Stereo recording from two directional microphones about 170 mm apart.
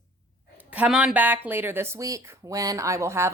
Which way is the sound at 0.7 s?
5° right (ahead or behind).